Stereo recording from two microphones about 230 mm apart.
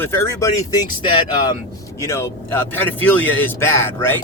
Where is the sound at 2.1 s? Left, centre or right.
Centre.